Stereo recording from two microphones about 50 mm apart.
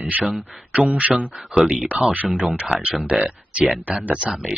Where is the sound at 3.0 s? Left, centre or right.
Right.